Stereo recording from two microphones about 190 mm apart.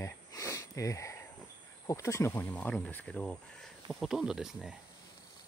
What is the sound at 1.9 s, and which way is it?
Speech, 15° left (ahead or behind).